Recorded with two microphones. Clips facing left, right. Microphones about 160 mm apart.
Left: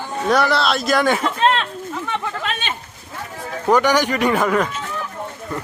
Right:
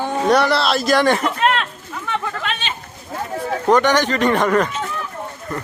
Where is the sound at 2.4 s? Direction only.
45° left (ahead or behind).